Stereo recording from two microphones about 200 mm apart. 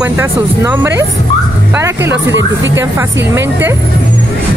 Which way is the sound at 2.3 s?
65° right (ahead or behind).